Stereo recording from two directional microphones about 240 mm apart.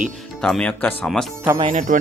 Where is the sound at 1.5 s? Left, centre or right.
Right.